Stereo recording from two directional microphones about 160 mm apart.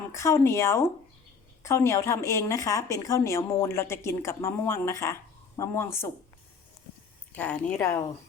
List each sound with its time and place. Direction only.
0.1 s a woman's voice: 20° left (ahead or behind)
7.3 s a woman's voice: 10° left (ahead or behind)